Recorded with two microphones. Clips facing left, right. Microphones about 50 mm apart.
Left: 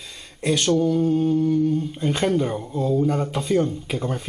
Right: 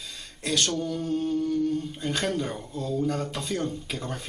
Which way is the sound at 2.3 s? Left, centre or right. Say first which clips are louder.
Left 7 dB; centre.